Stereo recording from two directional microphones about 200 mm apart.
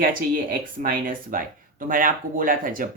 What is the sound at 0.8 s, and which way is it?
Speech, 45° right (ahead or behind).